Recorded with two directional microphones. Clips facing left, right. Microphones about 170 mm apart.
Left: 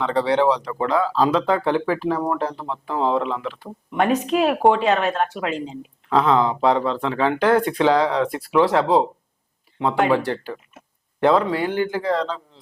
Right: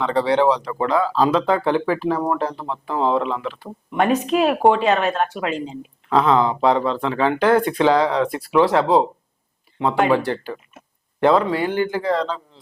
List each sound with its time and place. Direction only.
0.0 s speech: 15° right (ahead or behind)